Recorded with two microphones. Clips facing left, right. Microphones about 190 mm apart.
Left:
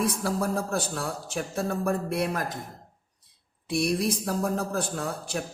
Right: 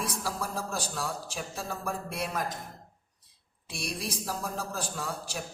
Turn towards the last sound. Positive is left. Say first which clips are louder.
# left 5 dB
turn(degrees=55)  # may be behind; listen again after turning